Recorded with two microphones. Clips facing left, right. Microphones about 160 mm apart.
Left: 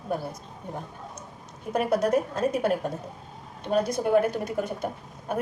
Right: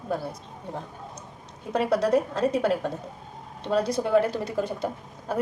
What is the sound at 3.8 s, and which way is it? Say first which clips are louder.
A woman's voice: right 1 dB; 30° right (ahead or behind).